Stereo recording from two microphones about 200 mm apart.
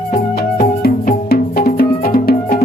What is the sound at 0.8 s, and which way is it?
Music, 50° left (ahead or behind).